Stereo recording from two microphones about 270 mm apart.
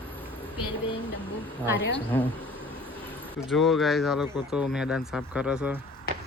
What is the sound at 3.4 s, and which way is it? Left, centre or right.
Speech, centre.